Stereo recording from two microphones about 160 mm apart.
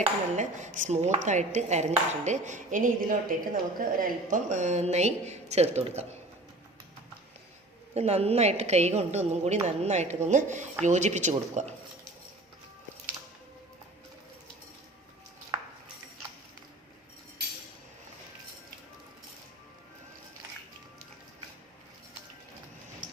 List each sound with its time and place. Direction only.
0.3 s speech: 50° right (ahead or behind)
7.9 s speech: 40° right (ahead or behind)